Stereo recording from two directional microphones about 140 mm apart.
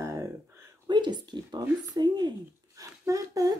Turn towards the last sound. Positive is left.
turn(degrees=-25)  # may be behind; listen again after turning